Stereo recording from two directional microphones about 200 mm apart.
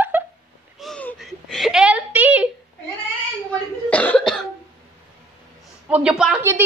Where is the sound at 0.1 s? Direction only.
10° right (ahead or behind).